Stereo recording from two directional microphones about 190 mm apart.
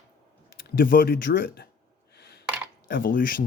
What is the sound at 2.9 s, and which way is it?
Speech, 50° left (ahead or behind).